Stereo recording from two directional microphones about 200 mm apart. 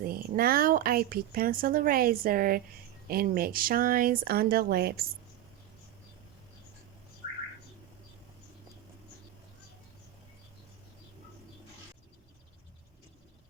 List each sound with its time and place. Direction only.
0.0 s speech: 45° right (ahead or behind)